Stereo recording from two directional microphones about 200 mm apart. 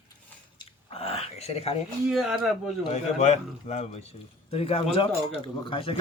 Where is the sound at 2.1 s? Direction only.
Centre (ahead or behind).